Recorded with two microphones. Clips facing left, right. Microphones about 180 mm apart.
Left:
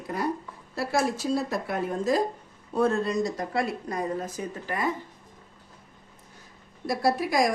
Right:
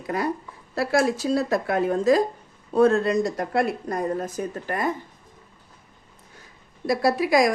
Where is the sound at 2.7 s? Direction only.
75° right (ahead or behind); by 4.9 s 50° right (ahead or behind).